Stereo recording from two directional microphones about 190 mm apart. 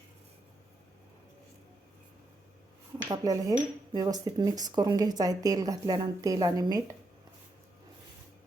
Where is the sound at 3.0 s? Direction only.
20° right (ahead or behind).